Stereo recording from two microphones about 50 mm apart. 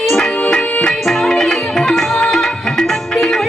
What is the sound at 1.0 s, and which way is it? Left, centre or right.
Music, centre.